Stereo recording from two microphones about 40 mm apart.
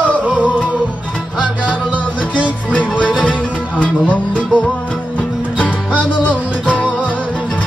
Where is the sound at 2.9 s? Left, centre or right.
Left.